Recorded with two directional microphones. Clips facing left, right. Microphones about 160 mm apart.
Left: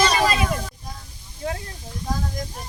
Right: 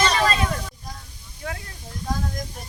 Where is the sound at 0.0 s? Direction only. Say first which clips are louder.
Left 1 dB; 10° left (ahead or behind).